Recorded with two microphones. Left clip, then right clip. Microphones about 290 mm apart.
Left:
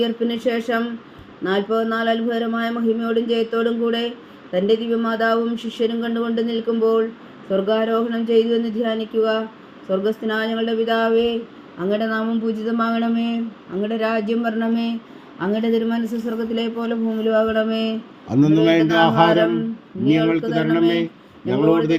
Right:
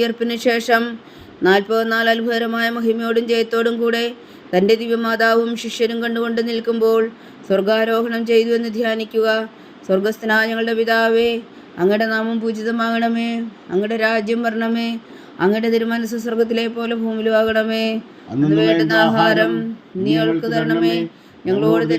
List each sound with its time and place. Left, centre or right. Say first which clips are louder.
0.0 s speech: right 3 dB; right
18.3 s a man's voice: even; left
20.1 s speech: even; right